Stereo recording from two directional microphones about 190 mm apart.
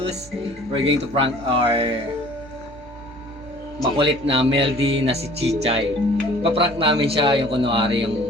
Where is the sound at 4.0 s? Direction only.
30° right (ahead or behind).